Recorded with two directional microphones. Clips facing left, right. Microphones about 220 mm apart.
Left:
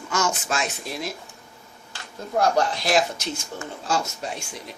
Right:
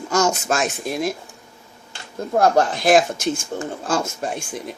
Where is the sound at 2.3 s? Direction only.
50° right (ahead or behind).